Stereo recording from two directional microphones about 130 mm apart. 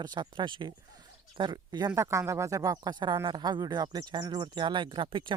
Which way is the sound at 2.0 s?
20° right (ahead or behind).